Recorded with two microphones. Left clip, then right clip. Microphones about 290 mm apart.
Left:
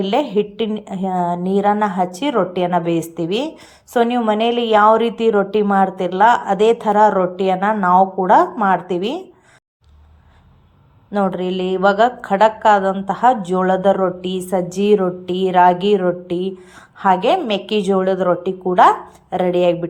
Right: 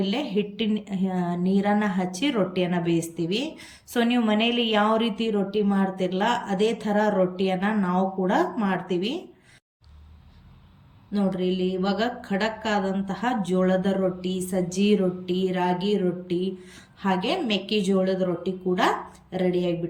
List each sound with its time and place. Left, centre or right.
0.0 s a woman's voice: centre
11.1 s a woman's voice: centre